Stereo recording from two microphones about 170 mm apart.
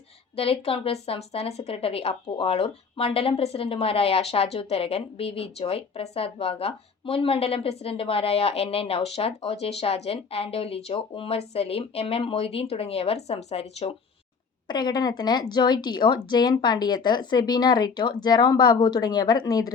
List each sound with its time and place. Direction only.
0.3 s a woman's voice: 35° left (ahead or behind)
14.7 s speech: 25° left (ahead or behind)